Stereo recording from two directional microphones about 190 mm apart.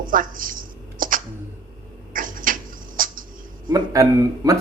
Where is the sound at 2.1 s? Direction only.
45° right (ahead or behind).